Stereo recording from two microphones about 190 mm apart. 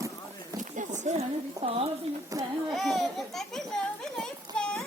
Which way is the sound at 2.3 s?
20° right (ahead or behind).